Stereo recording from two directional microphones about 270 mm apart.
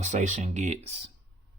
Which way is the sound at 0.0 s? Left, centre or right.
Right.